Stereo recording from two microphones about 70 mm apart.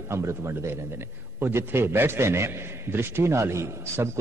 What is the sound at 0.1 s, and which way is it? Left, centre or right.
A man's voice, right.